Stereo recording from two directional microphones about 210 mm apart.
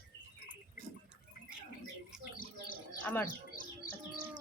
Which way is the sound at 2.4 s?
40° left (ahead or behind).